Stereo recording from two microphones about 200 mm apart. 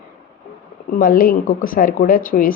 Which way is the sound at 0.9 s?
45° left (ahead or behind).